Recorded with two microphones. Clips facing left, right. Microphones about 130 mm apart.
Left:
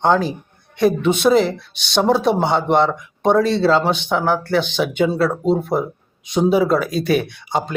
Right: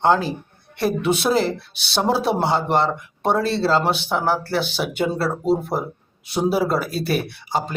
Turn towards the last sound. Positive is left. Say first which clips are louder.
# left 2 dB
turn(degrees=-5)  # may be behind; listen again after turning